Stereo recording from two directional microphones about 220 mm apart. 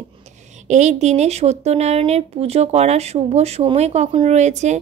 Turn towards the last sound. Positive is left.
turn(degrees=-30)  # may be behind; listen again after turning